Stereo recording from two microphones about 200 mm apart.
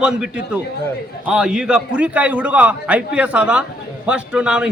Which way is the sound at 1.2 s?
5° right (ahead or behind).